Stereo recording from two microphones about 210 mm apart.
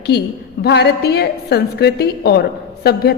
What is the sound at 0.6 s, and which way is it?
A woman's voice, 50° left (ahead or behind).